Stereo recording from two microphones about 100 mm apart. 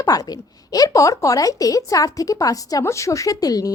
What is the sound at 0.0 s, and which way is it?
A woman's voice, 40° left (ahead or behind).